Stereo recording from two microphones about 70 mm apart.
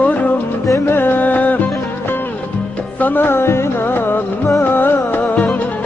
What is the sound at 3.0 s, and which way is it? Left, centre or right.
Music, left.